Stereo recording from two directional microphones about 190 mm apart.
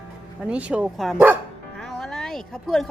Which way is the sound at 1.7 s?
Centre (ahead or behind).